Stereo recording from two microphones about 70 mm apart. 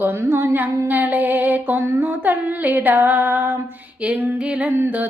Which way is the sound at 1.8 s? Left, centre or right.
Right.